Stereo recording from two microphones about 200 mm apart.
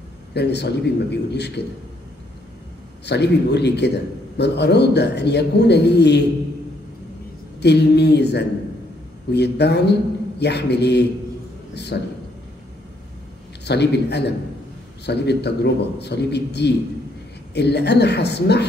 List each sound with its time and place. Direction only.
0.3 s a man's voice: 55° left (ahead or behind)
3.1 s a man's voice: 55° left (ahead or behind)
7.6 s a man's voice: 55° left (ahead or behind)
13.7 s a man's voice: 55° left (ahead or behind)